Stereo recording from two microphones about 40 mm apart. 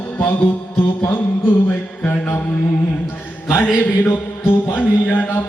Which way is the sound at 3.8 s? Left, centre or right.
Left.